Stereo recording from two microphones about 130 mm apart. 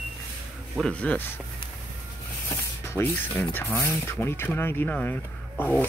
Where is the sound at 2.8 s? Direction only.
15° left (ahead or behind).